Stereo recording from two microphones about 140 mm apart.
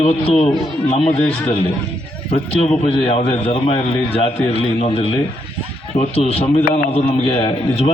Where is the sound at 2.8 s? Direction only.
45° left (ahead or behind).